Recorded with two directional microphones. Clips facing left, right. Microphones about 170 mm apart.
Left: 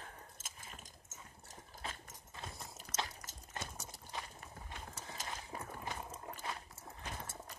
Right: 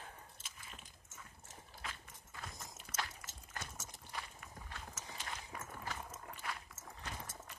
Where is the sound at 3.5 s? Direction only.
25° left (ahead or behind).